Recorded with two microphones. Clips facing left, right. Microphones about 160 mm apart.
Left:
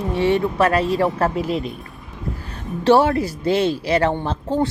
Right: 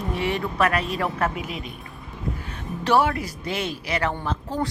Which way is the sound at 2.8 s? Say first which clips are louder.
Left 6 dB; 30° left (ahead or behind).